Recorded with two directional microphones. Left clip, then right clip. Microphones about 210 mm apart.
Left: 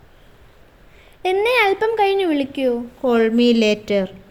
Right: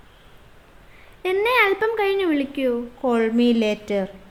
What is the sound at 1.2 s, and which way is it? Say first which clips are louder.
A woman's voice: left 2 dB; 5° left (ahead or behind).